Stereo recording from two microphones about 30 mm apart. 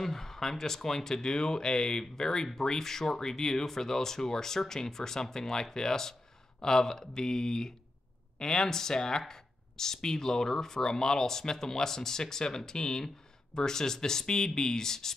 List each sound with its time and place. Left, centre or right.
0.0 s speech: centre